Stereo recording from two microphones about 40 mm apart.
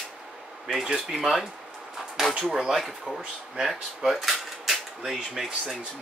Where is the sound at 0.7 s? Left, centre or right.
Centre.